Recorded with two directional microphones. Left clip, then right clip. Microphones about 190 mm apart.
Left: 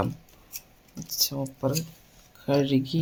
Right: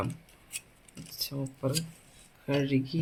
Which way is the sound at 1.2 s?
40° left (ahead or behind).